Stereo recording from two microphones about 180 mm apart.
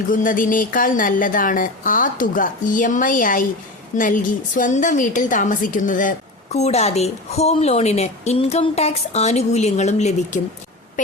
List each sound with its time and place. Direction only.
0.1 s a woman's voice: 45° left (ahead or behind)